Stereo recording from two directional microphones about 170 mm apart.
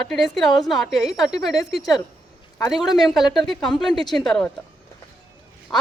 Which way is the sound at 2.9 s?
Centre (ahead or behind).